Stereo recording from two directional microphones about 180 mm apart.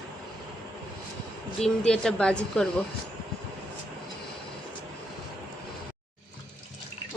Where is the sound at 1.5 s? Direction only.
5° left (ahead or behind).